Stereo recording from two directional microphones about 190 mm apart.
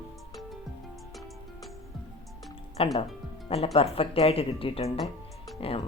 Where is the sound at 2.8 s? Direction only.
30° left (ahead or behind).